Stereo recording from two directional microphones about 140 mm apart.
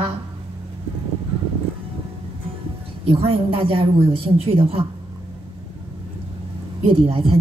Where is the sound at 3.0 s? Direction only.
40° right (ahead or behind).